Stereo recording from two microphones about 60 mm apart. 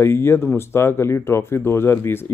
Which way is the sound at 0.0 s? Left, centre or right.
Left.